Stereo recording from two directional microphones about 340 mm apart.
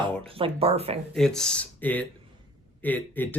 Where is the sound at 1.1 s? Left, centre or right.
Centre.